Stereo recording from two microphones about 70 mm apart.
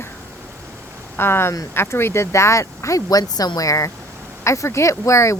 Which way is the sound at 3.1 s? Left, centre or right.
Left.